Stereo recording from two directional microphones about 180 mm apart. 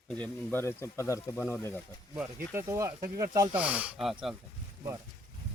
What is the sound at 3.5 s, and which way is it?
Speech, 5° right (ahead or behind).